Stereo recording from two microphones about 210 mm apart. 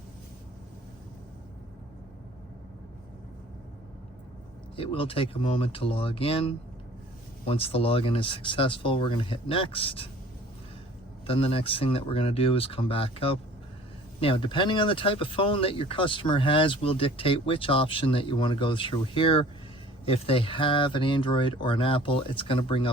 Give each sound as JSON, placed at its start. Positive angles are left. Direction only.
{"t": 4.8, "sound": "speech", "side_deg": 25}
{"t": 11.3, "sound": "speech", "side_deg": 25}